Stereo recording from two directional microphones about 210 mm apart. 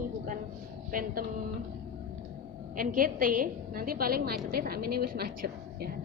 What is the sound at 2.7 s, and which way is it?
A woman's voice, 40° right (ahead or behind).